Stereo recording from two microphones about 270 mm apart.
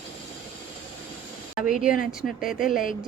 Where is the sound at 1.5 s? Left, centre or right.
Left.